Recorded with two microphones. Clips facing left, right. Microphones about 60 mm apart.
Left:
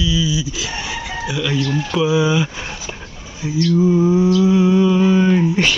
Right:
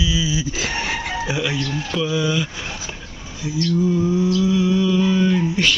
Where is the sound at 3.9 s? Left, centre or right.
Left.